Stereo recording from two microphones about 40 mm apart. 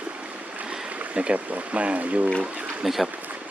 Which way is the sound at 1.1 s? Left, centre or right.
Right.